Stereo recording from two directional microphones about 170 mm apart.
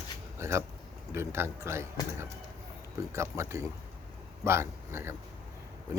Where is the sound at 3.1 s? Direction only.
15° right (ahead or behind).